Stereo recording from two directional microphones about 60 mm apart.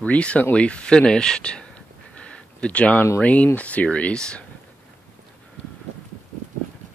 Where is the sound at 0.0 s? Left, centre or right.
Left.